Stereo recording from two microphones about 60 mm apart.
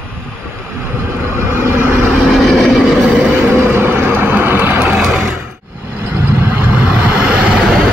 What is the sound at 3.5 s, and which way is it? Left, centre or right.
Vehicle, right.